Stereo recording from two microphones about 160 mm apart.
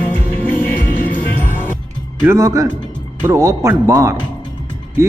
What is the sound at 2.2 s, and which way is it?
A man's voice, 20° right (ahead or behind).